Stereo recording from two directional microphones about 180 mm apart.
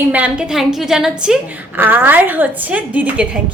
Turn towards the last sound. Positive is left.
turn(degrees=-5)  # may be behind; listen again after turning